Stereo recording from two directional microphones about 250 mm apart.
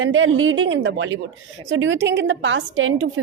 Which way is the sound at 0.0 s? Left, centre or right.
Right.